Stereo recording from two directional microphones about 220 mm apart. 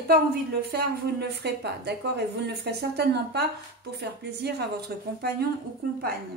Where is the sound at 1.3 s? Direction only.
50° right (ahead or behind).